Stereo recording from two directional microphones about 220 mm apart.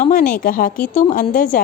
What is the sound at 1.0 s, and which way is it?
Speech, 30° left (ahead or behind).